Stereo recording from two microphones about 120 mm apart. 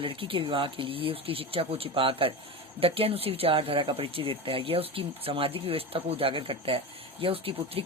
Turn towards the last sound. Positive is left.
turn(degrees=-50)  # may be behind; listen again after turning